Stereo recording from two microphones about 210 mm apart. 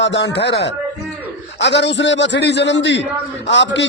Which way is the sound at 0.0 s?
60° left (ahead or behind).